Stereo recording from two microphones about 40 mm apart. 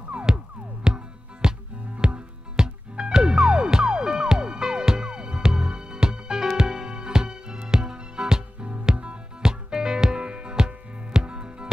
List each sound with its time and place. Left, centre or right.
0.8 s music: centre
9.5 s music: centre